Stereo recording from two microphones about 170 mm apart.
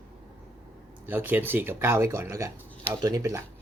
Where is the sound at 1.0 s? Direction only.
10° right (ahead or behind).